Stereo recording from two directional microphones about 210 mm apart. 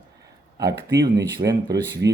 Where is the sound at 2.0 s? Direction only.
60° right (ahead or behind).